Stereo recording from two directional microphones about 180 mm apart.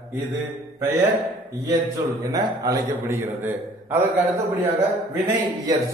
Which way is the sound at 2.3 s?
20° right (ahead or behind).